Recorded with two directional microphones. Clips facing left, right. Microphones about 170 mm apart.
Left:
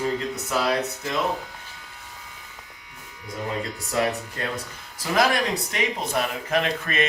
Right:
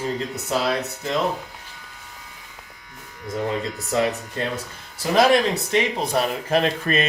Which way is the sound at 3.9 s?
25° right (ahead or behind).